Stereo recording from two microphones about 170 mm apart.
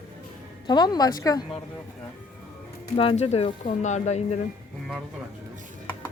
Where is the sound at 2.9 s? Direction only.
35° left (ahead or behind).